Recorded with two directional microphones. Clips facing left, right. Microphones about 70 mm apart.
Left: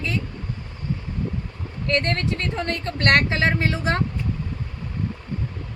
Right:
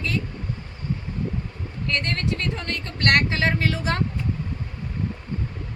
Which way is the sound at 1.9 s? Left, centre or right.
Left.